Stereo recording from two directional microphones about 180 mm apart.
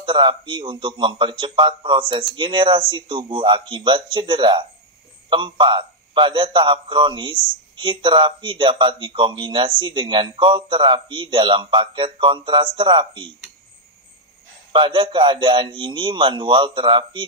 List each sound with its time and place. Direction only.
0.0 s a man's voice: 25° right (ahead or behind)
14.7 s a man's voice: 25° right (ahead or behind)